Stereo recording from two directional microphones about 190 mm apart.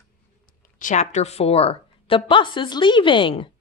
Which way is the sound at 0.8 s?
40° left (ahead or behind).